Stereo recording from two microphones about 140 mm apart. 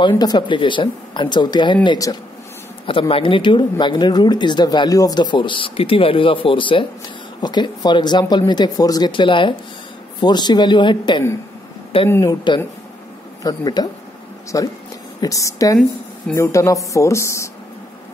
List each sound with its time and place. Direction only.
0.1 s speech: 30° left (ahead or behind)
2.9 s speech: 40° left (ahead or behind)
12.1 s speech: 20° left (ahead or behind)
13.4 s speech: 30° left (ahead or behind)